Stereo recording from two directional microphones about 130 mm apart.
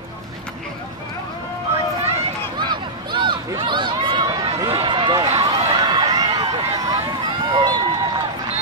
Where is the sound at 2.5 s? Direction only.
35° right (ahead or behind).